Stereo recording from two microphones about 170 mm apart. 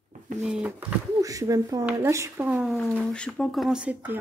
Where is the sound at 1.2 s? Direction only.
20° right (ahead or behind).